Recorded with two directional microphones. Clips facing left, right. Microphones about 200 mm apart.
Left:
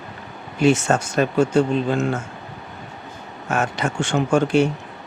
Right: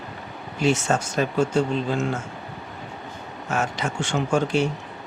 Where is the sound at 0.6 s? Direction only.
55° left (ahead or behind).